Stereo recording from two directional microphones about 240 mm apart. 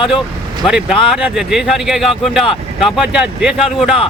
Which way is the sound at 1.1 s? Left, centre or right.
Centre.